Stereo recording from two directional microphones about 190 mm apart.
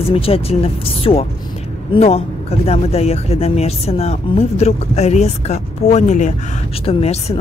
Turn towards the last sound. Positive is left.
turn(degrees=35)  # may be behind; listen again after turning